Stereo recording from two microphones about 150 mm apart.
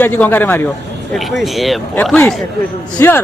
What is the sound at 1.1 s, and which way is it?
A man's voice, centre (ahead or behind).